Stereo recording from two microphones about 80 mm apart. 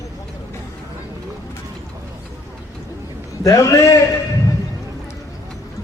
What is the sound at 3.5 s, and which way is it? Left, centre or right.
Speech, left.